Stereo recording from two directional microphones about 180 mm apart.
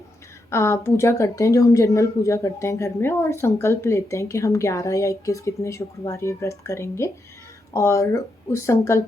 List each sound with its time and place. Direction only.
0.5 s speech: 15° left (ahead or behind)